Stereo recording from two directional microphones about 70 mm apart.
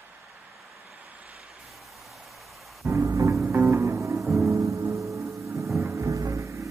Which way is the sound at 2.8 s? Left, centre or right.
Right.